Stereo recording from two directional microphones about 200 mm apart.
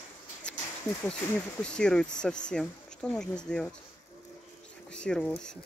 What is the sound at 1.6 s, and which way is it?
Speech, 5° left (ahead or behind).